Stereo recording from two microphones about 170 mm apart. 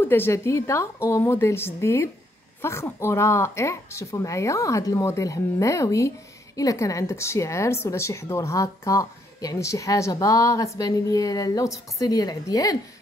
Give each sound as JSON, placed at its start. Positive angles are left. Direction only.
{"t": 0.0, "sound": "a woman's voice", "side_deg": 15}